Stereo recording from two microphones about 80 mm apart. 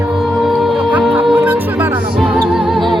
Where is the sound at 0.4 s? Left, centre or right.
Centre.